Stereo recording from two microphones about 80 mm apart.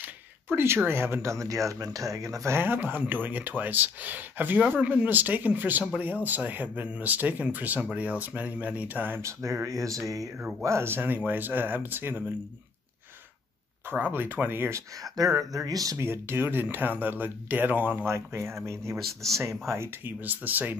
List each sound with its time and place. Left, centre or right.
0.0 s a sound: right
0.8 s speech: right
2.5 s speech: right
9.2 s speech: right
13.9 s speech: right
15.1 s speech: right
16.0 s speech: right
18.1 s speech: right
18.9 s speech: centre
19.7 s speech: right